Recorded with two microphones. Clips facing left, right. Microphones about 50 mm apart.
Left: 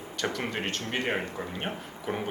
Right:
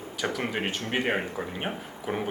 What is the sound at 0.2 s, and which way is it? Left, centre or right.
Speech, centre.